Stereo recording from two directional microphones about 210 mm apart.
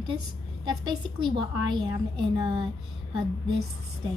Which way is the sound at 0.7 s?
20° right (ahead or behind).